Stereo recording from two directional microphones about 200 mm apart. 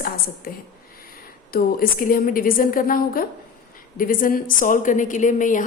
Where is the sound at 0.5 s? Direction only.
45° left (ahead or behind).